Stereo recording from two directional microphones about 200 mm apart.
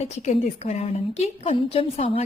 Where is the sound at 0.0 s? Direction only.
35° left (ahead or behind).